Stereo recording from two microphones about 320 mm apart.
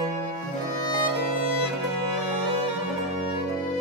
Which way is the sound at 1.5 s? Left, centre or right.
Right.